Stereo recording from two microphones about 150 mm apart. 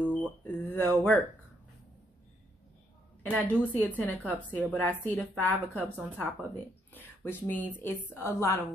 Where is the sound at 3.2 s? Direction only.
10° left (ahead or behind).